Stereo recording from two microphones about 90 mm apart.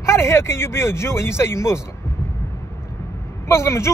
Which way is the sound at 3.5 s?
30° left (ahead or behind).